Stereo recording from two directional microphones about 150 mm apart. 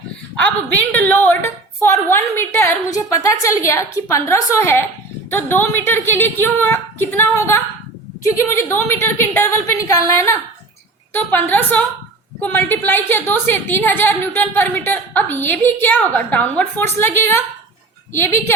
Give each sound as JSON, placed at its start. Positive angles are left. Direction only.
{"t": 0.4, "sound": "a woman's voice", "side_deg": 10}